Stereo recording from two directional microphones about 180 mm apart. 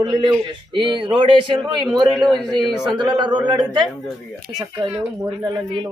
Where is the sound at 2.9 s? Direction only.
25° right (ahead or behind).